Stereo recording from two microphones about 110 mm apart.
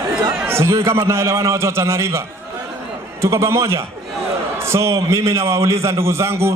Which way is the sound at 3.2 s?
25° right (ahead or behind).